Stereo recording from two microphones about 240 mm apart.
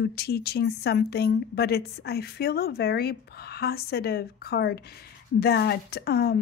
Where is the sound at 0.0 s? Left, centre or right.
Left.